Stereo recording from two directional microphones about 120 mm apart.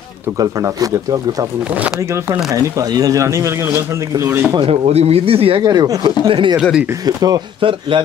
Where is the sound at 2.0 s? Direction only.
25° right (ahead or behind).